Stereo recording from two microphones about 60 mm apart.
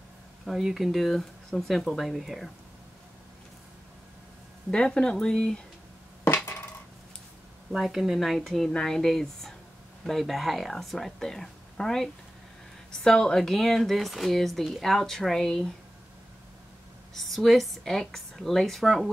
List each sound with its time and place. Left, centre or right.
0.5 s speech: centre
4.6 s speech: centre
6.2 s a sound: left
7.7 s speech: centre
17.1 s speech: centre